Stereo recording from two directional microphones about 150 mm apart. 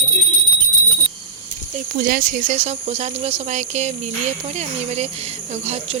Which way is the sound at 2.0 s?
65° right (ahead or behind).